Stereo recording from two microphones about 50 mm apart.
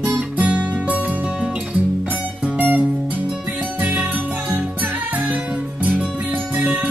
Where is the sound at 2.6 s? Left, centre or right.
Right.